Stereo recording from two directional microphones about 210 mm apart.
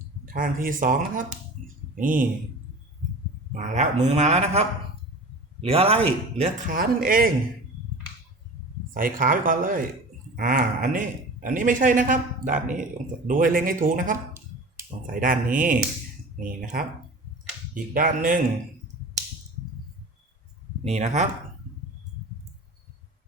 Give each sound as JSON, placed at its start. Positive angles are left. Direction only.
{"t": 0.3, "sound": "a man's voice", "side_deg": -40}
{"t": 1.6, "sound": "a sound", "side_deg": -40}
{"t": 3.5, "sound": "a man's voice", "side_deg": -35}
{"t": 6.7, "sound": "a man's voice", "side_deg": -45}
{"t": 8.9, "sound": "a man's voice", "side_deg": -40}
{"t": 17.9, "sound": "a man's voice", "side_deg": -40}
{"t": 20.8, "sound": "a man's voice", "side_deg": -35}